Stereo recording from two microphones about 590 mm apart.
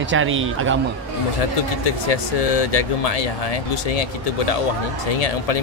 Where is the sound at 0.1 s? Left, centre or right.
Centre.